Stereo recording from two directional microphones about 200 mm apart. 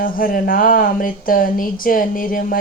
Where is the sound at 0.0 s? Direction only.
45° left (ahead or behind).